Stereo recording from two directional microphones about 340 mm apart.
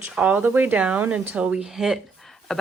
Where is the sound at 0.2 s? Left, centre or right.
Centre.